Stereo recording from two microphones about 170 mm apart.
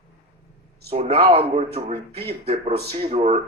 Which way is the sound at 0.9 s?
35° right (ahead or behind).